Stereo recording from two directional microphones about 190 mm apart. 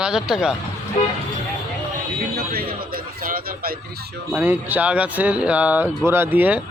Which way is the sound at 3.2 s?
45° right (ahead or behind).